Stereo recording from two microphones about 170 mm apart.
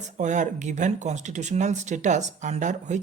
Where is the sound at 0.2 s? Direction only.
45° right (ahead or behind).